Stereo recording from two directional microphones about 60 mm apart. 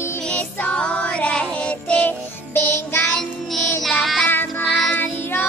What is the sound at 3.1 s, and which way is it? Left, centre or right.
Child singing, centre.